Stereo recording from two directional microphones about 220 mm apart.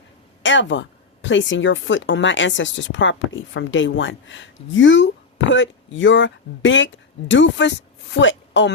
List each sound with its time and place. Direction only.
0.4 s a woman's voice: 55° left (ahead or behind)